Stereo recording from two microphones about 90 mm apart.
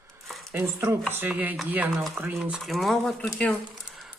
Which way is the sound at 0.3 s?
Centre (ahead or behind).